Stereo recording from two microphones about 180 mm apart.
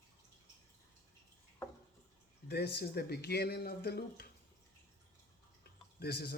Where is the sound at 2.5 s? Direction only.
65° left (ahead or behind).